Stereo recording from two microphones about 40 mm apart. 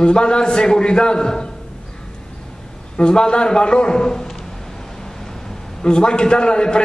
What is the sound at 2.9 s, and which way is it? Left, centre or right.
A man's voice, left.